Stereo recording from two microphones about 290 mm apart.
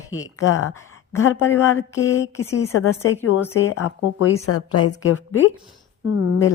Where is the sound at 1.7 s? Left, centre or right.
Left.